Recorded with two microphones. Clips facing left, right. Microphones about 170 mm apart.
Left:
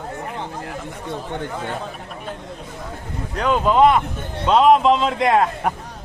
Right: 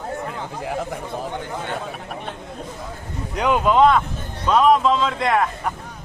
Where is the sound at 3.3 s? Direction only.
15° right (ahead or behind).